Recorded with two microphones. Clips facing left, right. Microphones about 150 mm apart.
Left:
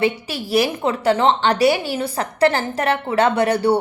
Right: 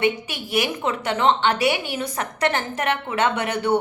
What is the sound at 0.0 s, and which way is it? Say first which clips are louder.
A woman's voice: left 2 dB; 35° left (ahead or behind).